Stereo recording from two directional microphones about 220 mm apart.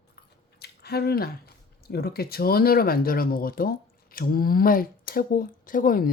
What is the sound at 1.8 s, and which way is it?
Speech, 45° left (ahead or behind).